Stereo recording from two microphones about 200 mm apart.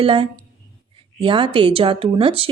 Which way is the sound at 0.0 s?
25° right (ahead or behind).